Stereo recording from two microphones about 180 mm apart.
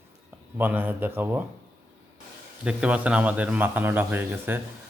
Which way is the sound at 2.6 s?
5° right (ahead or behind).